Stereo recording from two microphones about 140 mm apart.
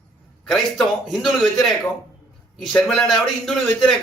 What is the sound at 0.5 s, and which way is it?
A man's voice, centre (ahead or behind).